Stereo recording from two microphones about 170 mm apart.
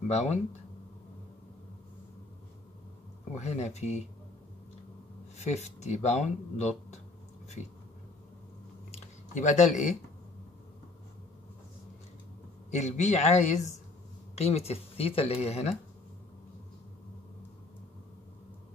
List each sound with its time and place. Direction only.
0.1 s speech: 40° left (ahead or behind)
3.3 s speech: 40° left (ahead or behind)
5.4 s speech: 40° left (ahead or behind)
8.9 s a sound: 45° left (ahead or behind)
12.7 s a man's voice: 45° left (ahead or behind)